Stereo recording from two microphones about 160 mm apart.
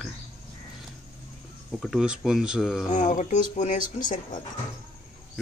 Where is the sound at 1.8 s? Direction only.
5° right (ahead or behind).